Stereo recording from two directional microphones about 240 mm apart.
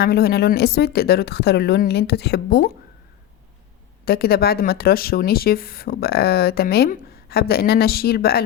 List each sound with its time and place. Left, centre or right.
0.0 s speech: left
4.0 s speech: left